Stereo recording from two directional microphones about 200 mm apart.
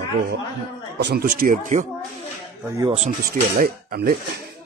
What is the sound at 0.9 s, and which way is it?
Speech, 50° right (ahead or behind).